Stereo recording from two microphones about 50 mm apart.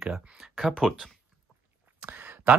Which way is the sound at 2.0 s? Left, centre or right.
Right.